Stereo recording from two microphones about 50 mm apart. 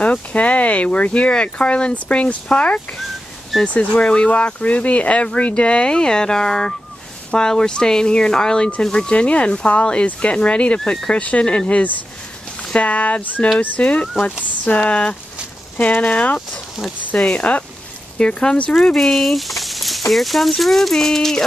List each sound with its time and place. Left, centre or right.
0.0 s speech: left
10.8 s speech: centre
18.9 s speech: centre